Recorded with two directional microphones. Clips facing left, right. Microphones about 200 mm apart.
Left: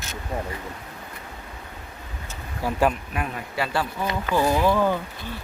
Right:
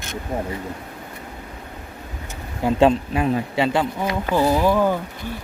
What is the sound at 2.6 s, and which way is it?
Speech, 25° right (ahead or behind).